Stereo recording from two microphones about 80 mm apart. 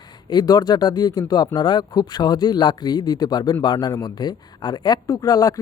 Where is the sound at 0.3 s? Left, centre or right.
Left.